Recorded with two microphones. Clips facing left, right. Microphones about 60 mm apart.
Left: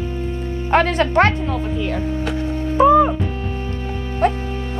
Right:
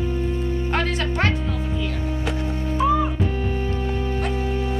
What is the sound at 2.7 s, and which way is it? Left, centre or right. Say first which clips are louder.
Speech: left 9 dB; left.